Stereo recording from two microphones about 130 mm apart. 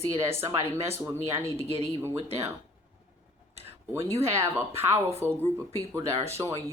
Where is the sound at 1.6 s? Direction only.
50° right (ahead or behind).